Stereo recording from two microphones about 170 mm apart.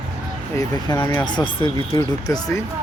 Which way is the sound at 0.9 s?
20° left (ahead or behind).